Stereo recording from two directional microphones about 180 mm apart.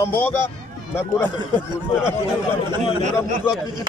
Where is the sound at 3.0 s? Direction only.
40° right (ahead or behind).